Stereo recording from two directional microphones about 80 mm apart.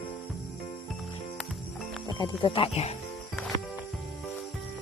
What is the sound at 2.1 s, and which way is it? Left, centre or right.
Speech, left.